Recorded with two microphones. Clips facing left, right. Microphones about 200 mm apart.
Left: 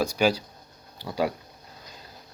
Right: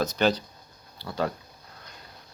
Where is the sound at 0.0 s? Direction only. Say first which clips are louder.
Left 1 dB; 10° left (ahead or behind).